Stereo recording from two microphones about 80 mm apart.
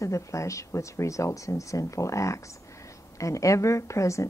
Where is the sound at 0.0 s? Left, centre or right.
Left.